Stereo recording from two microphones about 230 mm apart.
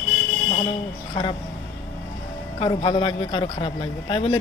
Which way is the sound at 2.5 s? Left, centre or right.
Left.